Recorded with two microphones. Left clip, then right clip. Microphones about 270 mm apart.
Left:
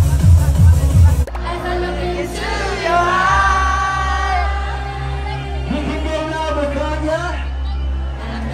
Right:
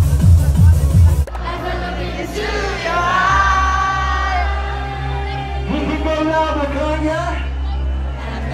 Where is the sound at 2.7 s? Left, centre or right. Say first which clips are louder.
Left 3 dB; left.